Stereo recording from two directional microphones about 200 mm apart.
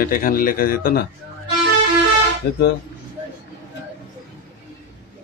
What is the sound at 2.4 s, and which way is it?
Speech, 55° left (ahead or behind).